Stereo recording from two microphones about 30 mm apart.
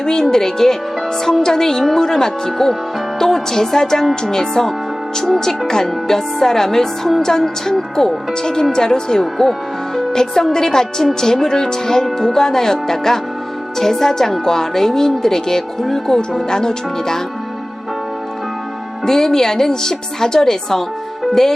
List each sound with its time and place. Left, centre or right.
0.0 s a woman's voice: left
1.2 s music: centre
3.2 s a woman's voice: centre
5.2 s music: centre
8.7 s a woman's voice: left
12.1 s music: centre
16.5 s a woman's voice: left
19.0 s music: centre